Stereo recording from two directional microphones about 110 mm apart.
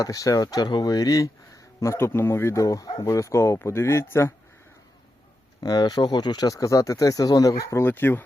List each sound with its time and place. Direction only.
0.0 s speech: 30° left (ahead or behind)
5.5 s speech: 35° left (ahead or behind); by 8.2 s 20° left (ahead or behind)